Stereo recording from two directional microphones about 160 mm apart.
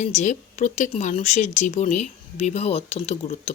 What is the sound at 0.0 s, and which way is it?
Speech, 45° left (ahead or behind).